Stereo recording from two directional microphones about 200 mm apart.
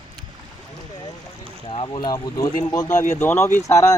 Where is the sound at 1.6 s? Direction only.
25° left (ahead or behind).